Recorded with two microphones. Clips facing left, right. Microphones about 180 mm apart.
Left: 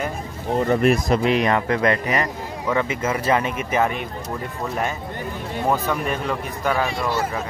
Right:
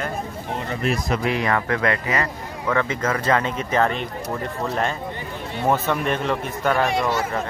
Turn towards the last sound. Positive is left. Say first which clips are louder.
# right 1 dB
turn(degrees=5)  # may be behind; listen again after turning